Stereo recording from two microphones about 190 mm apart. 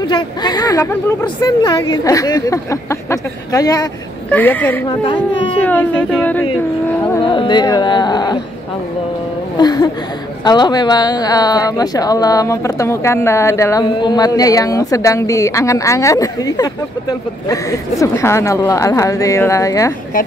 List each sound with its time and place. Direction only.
0.1 s a woman's voice: 20° left (ahead or behind)
4.8 s speech: 25° left (ahead or behind)
5.6 s a woman's voice: 10° left (ahead or behind)
7.2 s speech: 25° left (ahead or behind)
9.6 s a sound: 20° left (ahead or behind)
10.4 s a woman's voice: 20° left (ahead or behind)